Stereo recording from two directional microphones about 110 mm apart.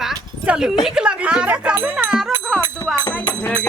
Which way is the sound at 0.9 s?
10° right (ahead or behind).